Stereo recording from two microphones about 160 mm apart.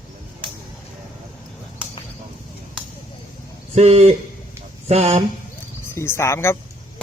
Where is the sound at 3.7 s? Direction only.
40° right (ahead or behind).